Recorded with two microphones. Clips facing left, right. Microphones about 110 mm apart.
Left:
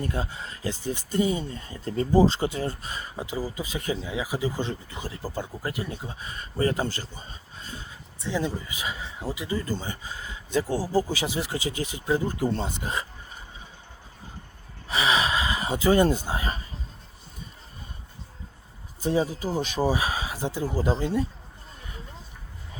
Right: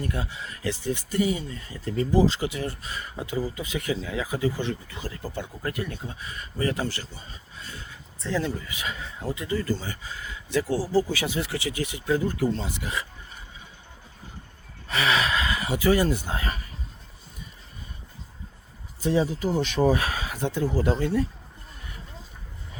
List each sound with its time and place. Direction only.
0.0 s speech: 30° left (ahead or behind)
4.0 s speech: 20° left (ahead or behind); by 5.7 s 35° left (ahead or behind)
5.7 s speech: 20° left (ahead or behind)
7.7 s speech: 20° left (ahead or behind)
14.8 s speech: 15° left (ahead or behind)
19.5 s speech: 10° left (ahead or behind)